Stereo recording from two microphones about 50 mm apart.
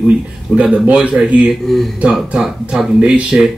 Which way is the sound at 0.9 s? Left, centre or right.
Centre.